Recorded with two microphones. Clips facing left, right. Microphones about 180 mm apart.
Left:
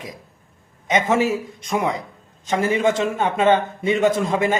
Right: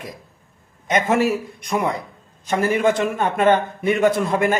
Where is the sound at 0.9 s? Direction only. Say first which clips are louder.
Even; 15° left (ahead or behind).